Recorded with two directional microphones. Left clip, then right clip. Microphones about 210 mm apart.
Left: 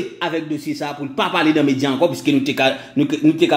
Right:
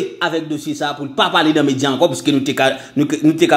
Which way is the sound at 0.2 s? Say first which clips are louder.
Right 2 dB; 10° right (ahead or behind).